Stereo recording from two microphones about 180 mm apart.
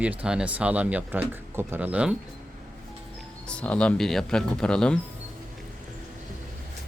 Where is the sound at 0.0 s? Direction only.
5° right (ahead or behind).